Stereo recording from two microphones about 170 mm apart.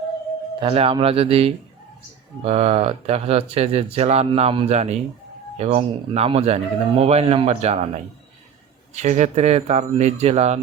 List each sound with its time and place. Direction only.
0.6 s speech: 35° right (ahead or behind)